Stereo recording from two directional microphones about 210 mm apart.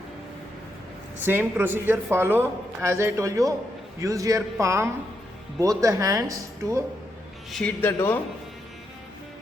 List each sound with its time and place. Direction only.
1.2 s a man's voice: 10° right (ahead or behind)
7.5 s speech: 5° left (ahead or behind)